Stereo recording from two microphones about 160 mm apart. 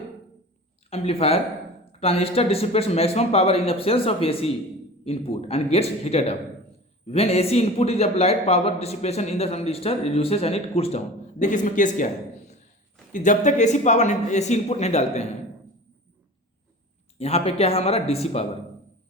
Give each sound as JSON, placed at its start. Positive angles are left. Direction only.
{"t": 0.9, "sound": "a man's voice", "side_deg": 40}
{"t": 13.1, "sound": "speech", "side_deg": 50}
{"t": 17.2, "sound": "a man's voice", "side_deg": 40}